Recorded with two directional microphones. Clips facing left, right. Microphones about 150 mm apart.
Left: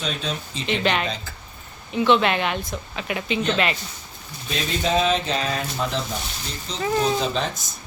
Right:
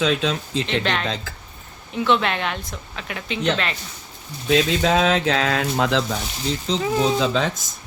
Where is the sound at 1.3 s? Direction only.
90° right.